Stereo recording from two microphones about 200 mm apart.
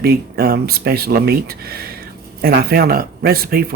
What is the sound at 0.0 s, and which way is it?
Speech, 50° right (ahead or behind).